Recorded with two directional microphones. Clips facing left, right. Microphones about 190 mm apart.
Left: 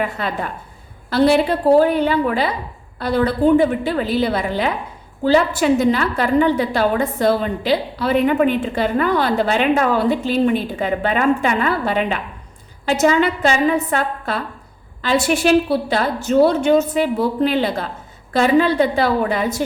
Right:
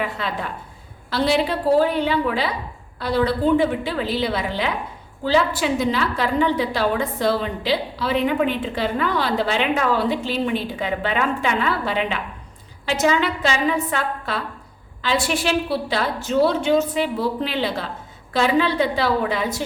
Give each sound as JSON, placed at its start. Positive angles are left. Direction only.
{"t": 0.0, "sound": "a woman's voice", "side_deg": 50}